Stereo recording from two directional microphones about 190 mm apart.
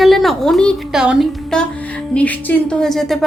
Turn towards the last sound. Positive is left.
turn(degrees=0)  # may be behind; listen again after turning